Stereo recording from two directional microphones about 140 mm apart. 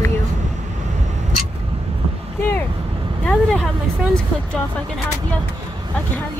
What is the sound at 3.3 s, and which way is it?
Speech, 5° left (ahead or behind).